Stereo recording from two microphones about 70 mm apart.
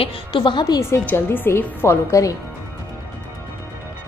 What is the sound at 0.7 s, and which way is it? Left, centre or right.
A woman's voice, left.